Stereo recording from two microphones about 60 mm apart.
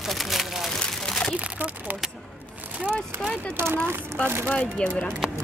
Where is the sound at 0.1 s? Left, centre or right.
Centre.